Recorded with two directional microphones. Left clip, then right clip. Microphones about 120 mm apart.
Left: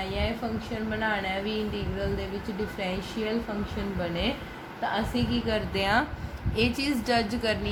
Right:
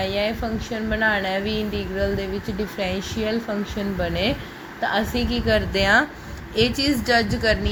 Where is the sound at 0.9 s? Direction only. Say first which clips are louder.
Right 8 dB; 60° right (ahead or behind).